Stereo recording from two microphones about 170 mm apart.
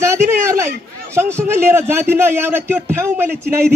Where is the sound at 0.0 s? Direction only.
15° right (ahead or behind).